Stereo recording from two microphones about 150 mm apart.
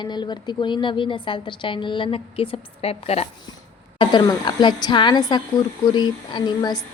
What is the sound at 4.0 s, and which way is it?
A woman's voice, 30° left (ahead or behind).